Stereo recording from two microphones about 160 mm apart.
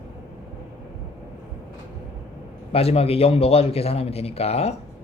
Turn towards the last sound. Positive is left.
turn(degrees=40)  # may be behind; listen again after turning